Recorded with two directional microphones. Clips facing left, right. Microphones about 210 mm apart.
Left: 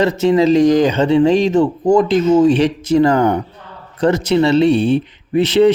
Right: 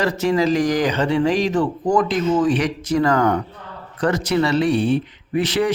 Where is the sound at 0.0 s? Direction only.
25° left (ahead or behind).